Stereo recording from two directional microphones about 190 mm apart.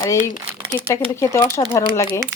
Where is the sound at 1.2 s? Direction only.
15° left (ahead or behind).